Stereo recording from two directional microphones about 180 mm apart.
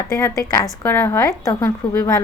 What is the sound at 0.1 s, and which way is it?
A woman's voice, 15° left (ahead or behind).